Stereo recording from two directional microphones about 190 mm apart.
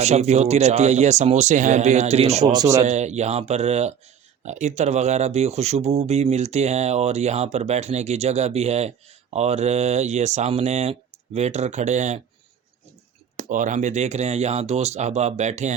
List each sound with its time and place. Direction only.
0.0 s speech: 35° right (ahead or behind)
2.4 s speech: 20° right (ahead or behind)
2.8 s speech: 35° right (ahead or behind)
13.3 s speech: 40° right (ahead or behind)